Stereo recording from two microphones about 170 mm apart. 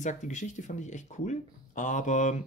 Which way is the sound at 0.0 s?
45° left (ahead or behind).